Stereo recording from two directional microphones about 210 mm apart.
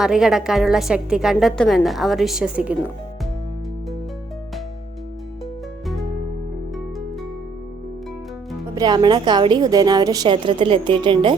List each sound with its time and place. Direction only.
0.0 s a woman's voice: centre (ahead or behind)
8.7 s a woman's voice: 20° right (ahead or behind)